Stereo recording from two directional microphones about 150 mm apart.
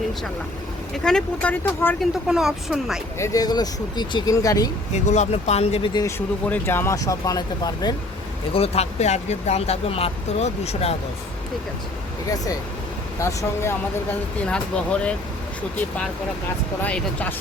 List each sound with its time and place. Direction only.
1.0 s speech: 5° left (ahead or behind)
2.0 s speech: 5° right (ahead or behind)
3.2 s speech: 20° left (ahead or behind)
5.0 s speech: 50° left (ahead or behind)
5.9 s speech: 20° left (ahead or behind)
8.5 s speech: 40° left (ahead or behind)
13.1 s speech: 20° left (ahead or behind)
16.8 s speech: 10° left (ahead or behind)